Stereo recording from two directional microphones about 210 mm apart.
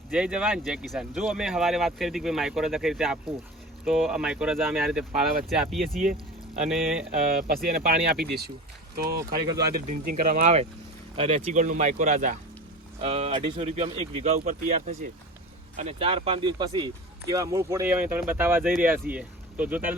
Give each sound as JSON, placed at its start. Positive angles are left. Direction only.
{"t": 0.1, "sound": "speech", "side_deg": -5}
{"t": 7.1, "sound": "speech", "side_deg": -45}